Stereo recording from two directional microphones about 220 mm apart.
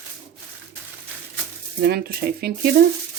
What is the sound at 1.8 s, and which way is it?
Sizzle, 45° right (ahead or behind).